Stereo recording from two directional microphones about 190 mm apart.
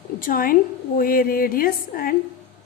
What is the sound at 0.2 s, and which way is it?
A woman's voice, 45° left (ahead or behind).